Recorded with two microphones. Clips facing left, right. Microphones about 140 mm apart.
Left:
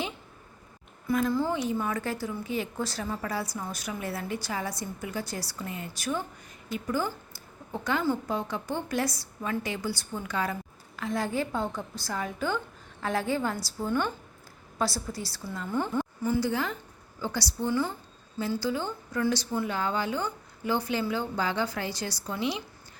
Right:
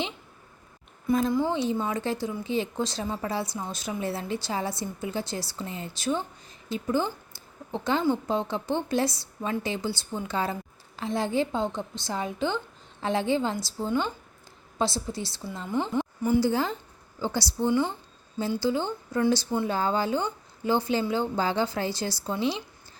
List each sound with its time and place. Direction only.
1.0 s a woman's voice: 20° right (ahead or behind)
16.5 s a woman's voice: 30° right (ahead or behind)